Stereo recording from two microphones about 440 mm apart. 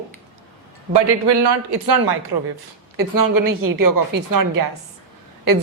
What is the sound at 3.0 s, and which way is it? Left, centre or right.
Speech, right.